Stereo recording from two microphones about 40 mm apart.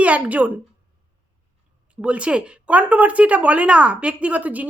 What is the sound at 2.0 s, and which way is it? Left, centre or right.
Speech, right.